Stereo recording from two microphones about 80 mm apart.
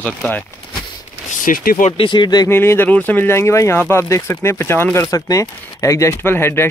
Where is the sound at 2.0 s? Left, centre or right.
Left.